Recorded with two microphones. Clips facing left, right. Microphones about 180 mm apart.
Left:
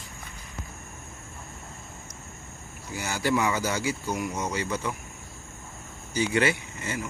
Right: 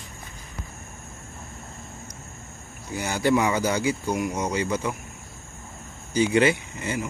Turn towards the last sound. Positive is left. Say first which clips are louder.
# right 4 dB
turn(degrees=-20)  # may be behind; listen again after turning